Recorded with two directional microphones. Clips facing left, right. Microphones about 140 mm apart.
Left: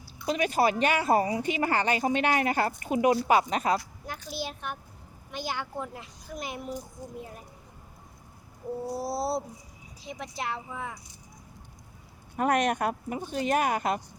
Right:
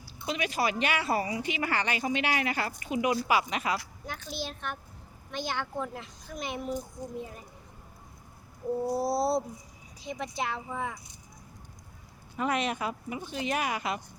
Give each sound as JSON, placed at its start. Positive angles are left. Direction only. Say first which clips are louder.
{"t": 0.3, "sound": "speech", "louder": "left 5 dB", "side_deg": 45}
{"t": 4.0, "sound": "a woman's voice", "louder": "left 1 dB", "side_deg": 5}
{"t": 9.0, "sound": "speech", "louder": "right 1 dB", "side_deg": 0}
{"t": 12.4, "sound": "speech", "louder": "left 4 dB", "side_deg": 50}